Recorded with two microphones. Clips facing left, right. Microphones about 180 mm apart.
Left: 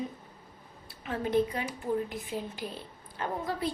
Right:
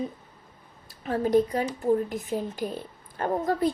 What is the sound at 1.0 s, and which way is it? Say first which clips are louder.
A woman's voice: right 5 dB; 40° right (ahead or behind).